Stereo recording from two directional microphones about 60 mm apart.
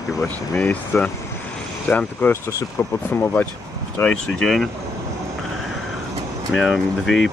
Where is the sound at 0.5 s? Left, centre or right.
Left.